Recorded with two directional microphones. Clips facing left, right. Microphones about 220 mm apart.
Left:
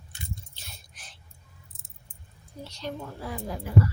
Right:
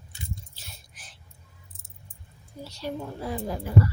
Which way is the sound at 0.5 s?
5° right (ahead or behind).